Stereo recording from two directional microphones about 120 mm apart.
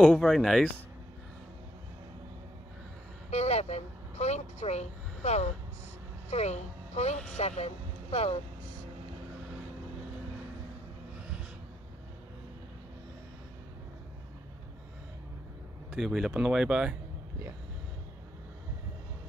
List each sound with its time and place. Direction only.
0.0 s speech: 5° left (ahead or behind)
3.3 s vehicle: 65° left (ahead or behind)
6.3 s a woman's voice: 65° left (ahead or behind)
15.9 s speech: centre (ahead or behind)